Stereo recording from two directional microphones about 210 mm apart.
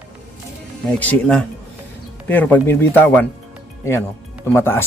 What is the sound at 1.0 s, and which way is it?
Speech, 5° left (ahead or behind).